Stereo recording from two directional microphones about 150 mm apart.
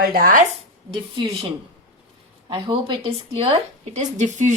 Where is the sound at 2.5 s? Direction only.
35° right (ahead or behind).